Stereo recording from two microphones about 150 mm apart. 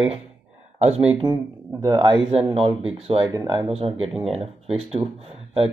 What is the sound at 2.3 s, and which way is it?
Speech, 40° right (ahead or behind).